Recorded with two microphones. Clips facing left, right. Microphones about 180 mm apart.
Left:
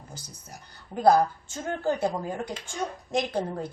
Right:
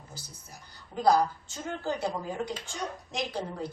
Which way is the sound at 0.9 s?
55° left (ahead or behind).